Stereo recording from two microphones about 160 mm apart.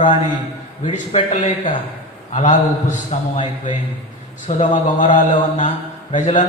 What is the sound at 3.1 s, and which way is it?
Speech, 45° left (ahead or behind).